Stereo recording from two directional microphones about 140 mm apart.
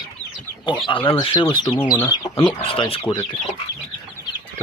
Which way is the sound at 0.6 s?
35° left (ahead or behind).